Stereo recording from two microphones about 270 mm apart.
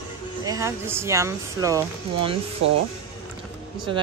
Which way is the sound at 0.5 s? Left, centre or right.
Centre.